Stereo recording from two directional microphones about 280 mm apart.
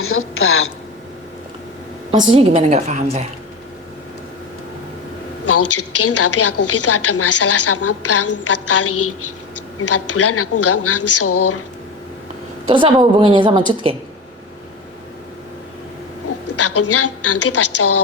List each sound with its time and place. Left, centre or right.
0.0 s a woman's voice: left
2.1 s a woman's voice: centre
5.5 s a woman's voice: left
12.6 s a woman's voice: centre
16.6 s a woman's voice: left